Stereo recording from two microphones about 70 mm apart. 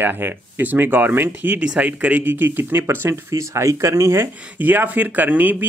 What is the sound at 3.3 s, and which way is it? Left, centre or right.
Speech, right.